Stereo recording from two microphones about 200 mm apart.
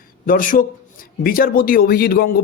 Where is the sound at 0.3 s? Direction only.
45° left (ahead or behind).